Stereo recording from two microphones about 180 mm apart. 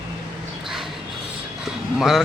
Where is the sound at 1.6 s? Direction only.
Centre (ahead or behind).